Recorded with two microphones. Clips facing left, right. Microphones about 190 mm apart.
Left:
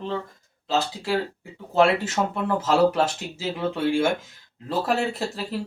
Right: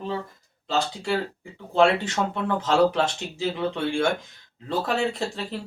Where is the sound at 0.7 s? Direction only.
5° left (ahead or behind).